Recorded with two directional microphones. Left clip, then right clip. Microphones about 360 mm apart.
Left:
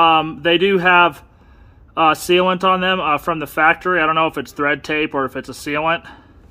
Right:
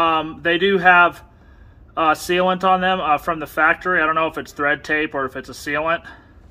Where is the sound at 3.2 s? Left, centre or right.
Centre.